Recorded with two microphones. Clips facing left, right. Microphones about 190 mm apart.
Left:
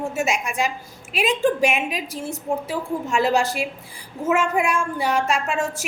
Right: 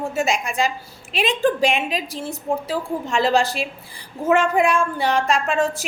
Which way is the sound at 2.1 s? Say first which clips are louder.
Even; 30° right (ahead or behind).